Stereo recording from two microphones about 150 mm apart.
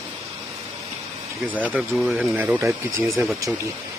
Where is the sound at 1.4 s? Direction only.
10° right (ahead or behind).